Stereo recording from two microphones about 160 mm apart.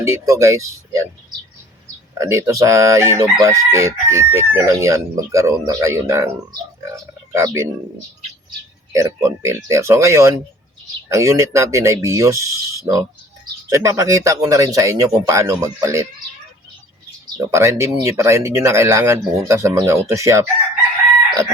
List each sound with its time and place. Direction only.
0.0 s chicken: 20° right (ahead or behind)
2.1 s chicken: 20° right (ahead or behind)
8.9 s speech: 20° right (ahead or behind)
11.1 s chicken: 20° right (ahead or behind)
17.2 s speech: 20° right (ahead or behind)
20.1 s chicken: 20° right (ahead or behind)